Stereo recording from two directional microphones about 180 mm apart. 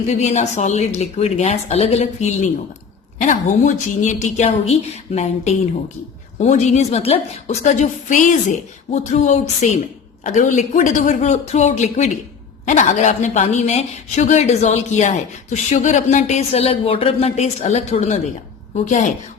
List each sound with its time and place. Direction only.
0.1 s a woman's voice: 40° left (ahead or behind)